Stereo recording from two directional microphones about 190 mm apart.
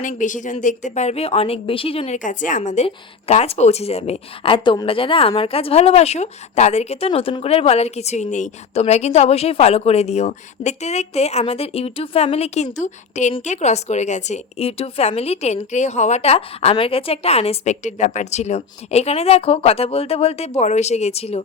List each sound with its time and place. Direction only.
0.0 s a woman's voice: 40° left (ahead or behind)
2.1 s a woman's voice: 45° left (ahead or behind)